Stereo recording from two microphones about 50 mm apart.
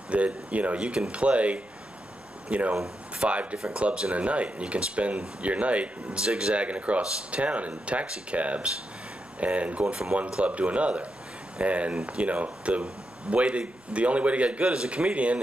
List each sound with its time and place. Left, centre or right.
0.1 s speech: right